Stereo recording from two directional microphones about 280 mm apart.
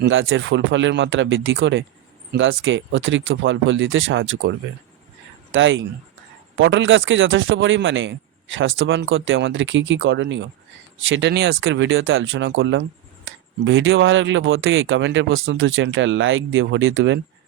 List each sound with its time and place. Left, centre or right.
0.0 s speech: right
5.5 s speech: right